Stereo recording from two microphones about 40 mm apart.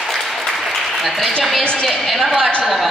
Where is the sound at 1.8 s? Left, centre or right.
Centre.